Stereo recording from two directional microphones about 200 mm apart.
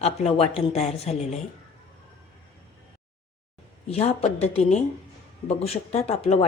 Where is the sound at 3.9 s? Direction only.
30° left (ahead or behind).